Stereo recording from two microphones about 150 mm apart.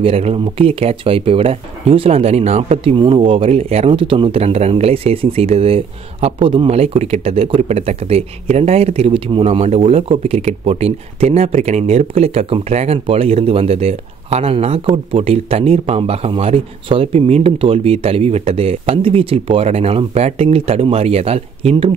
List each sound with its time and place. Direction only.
0.0 s speech: 40° right (ahead or behind)